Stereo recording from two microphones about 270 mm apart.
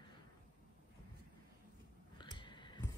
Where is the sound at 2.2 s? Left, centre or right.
Centre.